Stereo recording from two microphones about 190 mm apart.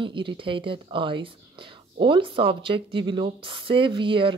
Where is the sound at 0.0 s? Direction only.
25° right (ahead or behind).